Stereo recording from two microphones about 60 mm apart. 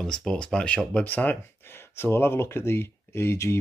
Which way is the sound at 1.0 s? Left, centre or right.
Left.